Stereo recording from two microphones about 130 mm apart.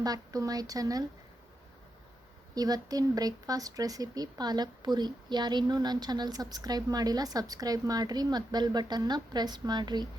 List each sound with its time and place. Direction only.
0.0 s speech: 30° right (ahead or behind)
2.6 s speech: 30° right (ahead or behind)